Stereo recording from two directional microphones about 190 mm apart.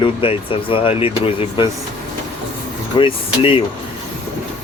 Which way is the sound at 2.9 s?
30° left (ahead or behind).